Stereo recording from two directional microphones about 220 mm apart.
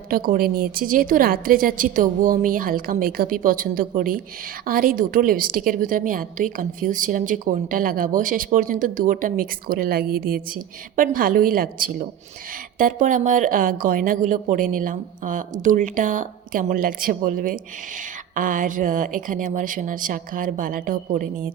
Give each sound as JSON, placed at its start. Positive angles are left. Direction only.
{"t": 0.1, "sound": "speech", "side_deg": -40}